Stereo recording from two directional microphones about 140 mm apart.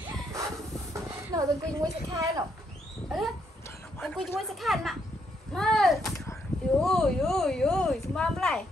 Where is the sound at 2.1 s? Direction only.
25° right (ahead or behind).